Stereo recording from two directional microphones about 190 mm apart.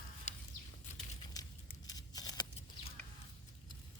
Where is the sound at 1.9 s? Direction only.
20° left (ahead or behind).